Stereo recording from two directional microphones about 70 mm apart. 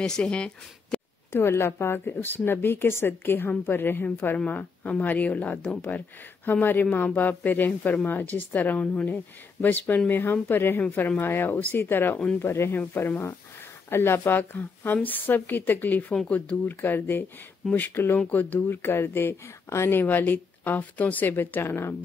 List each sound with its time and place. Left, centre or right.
0.0 s speech: centre
1.3 s speech: left